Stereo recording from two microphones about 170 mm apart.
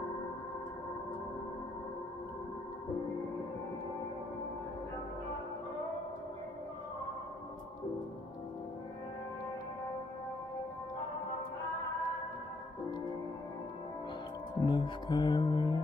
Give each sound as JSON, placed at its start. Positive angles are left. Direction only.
{"t": 14.6, "sound": "music", "side_deg": 25}